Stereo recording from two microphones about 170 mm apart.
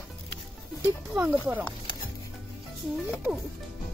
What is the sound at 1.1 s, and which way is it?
Speech, 10° right (ahead or behind).